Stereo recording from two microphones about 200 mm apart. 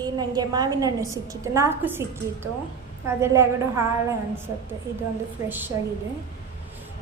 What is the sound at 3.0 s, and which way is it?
A woman's voice, 15° right (ahead or behind).